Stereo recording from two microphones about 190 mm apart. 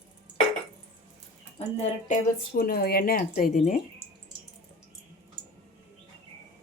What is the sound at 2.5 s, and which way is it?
Speech, 50° left (ahead or behind).